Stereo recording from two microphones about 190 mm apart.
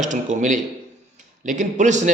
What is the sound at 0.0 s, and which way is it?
A man's voice, 40° right (ahead or behind).